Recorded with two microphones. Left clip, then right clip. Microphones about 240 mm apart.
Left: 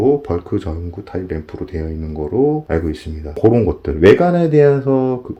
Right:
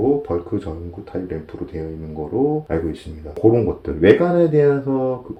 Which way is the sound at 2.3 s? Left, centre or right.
Left.